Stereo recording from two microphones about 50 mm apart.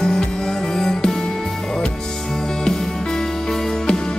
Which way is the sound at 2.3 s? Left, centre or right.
Centre.